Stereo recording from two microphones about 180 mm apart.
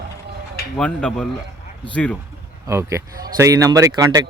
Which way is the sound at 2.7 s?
15° right (ahead or behind).